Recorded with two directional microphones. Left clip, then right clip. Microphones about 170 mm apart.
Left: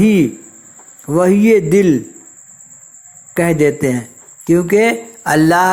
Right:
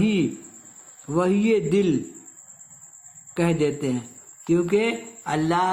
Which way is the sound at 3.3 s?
30° left (ahead or behind).